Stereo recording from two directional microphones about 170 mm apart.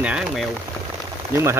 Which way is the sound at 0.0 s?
5° right (ahead or behind).